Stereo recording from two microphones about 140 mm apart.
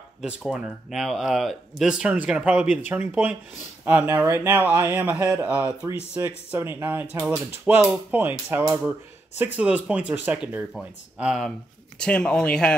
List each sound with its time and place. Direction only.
0.2 s speech: 5° right (ahead or behind)
12.0 s speech: 5° left (ahead or behind)